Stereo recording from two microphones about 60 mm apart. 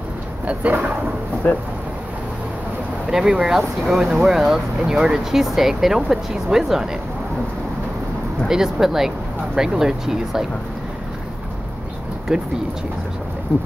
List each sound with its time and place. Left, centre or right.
0.5 s speech: right
1.5 s speech: left
3.1 s speech: centre
8.5 s speech: centre
12.3 s speech: centre